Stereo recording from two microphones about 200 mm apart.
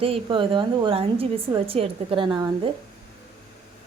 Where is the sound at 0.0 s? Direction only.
25° right (ahead or behind).